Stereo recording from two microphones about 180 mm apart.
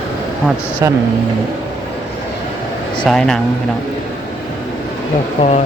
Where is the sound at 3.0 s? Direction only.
5° left (ahead or behind).